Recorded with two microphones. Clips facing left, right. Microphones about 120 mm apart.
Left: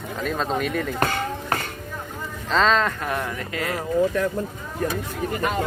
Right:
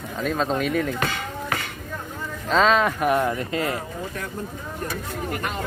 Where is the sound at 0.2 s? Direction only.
Centre (ahead or behind).